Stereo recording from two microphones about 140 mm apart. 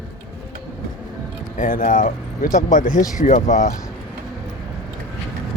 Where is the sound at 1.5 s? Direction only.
75° left (ahead or behind).